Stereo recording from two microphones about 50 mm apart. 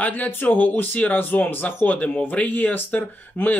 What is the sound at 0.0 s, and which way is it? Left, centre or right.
Speech, left.